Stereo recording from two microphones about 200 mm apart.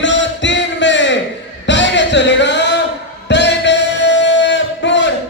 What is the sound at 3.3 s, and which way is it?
Music, 60° left (ahead or behind).